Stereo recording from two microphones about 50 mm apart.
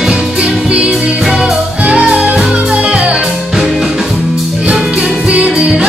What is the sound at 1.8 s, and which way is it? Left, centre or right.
Music, right.